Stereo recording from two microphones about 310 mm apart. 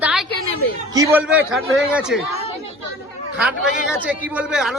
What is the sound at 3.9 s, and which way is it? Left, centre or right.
Speech, centre.